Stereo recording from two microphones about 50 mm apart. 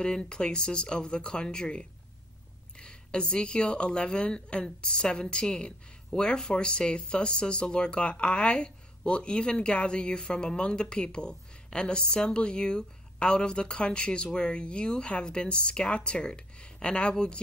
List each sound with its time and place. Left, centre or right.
0.0 s speech: centre